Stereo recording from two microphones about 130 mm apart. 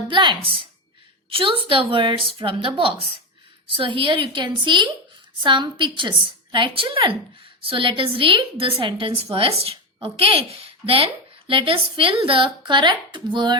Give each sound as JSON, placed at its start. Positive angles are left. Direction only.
{"t": 0.1, "sound": "a woman's voice", "side_deg": -35}